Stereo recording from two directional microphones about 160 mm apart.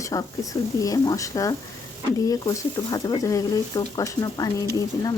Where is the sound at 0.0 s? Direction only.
20° left (ahead or behind).